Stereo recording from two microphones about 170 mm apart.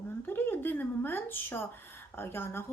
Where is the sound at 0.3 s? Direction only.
15° left (ahead or behind).